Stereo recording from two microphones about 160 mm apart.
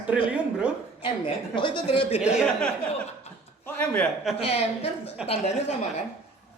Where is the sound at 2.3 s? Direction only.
5° left (ahead or behind).